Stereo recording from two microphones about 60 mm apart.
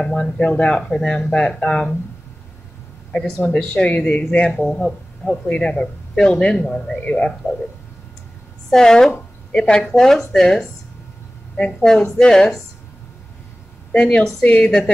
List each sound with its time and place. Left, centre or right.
0.0 s speech: centre
3.4 s speech: centre
3.9 s speech: left
4.6 s speech: centre
8.6 s speech: centre
13.9 s speech: centre